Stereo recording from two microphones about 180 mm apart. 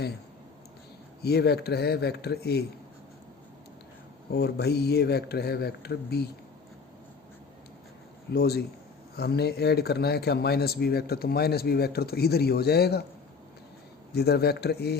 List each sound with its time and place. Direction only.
1.2 s a man's voice: 65° left (ahead or behind)
4.3 s a man's voice: 65° left (ahead or behind)
8.3 s a man's voice: 60° left (ahead or behind)
14.1 s a man's voice: 60° left (ahead or behind)